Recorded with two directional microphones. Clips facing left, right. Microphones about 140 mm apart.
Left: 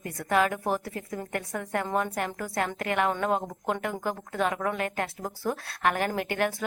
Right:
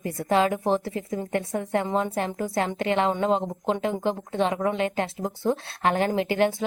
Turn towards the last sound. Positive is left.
turn(degrees=-25)  # may be behind; listen again after turning